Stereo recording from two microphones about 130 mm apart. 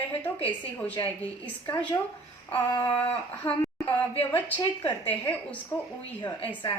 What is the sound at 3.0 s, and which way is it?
A woman's voice, 10° left (ahead or behind).